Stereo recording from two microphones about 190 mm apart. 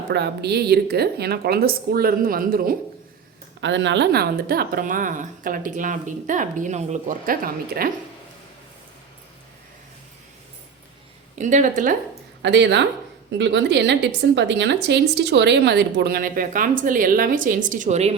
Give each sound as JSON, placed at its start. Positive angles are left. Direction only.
{"t": 0.1, "sound": "a woman's voice", "side_deg": -60}
{"t": 3.6, "sound": "a woman's voice", "side_deg": -70}
{"t": 11.3, "sound": "speech", "side_deg": -40}
{"t": 12.4, "sound": "a woman's voice", "side_deg": -65}